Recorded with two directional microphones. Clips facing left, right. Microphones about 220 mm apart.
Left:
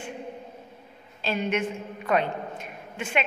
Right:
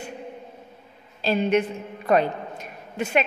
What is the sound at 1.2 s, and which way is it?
A woman's voice, 35° right (ahead or behind).